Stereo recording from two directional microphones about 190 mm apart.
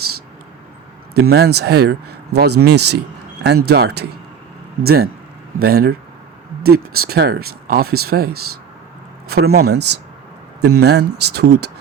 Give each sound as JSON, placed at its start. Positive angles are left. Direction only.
{"t": 1.1, "sound": "speech", "side_deg": -55}